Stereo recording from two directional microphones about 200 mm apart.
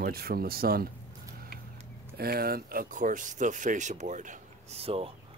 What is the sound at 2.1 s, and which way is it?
Speech, 50° right (ahead or behind).